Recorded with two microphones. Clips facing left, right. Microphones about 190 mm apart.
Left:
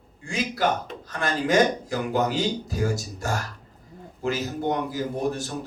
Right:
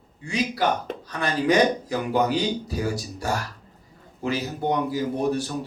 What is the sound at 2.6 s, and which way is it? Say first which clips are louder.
Speech: left 1 dB; 45° left (ahead or behind).